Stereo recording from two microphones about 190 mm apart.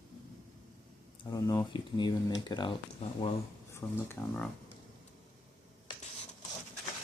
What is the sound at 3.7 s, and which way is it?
Speech, 10° left (ahead or behind).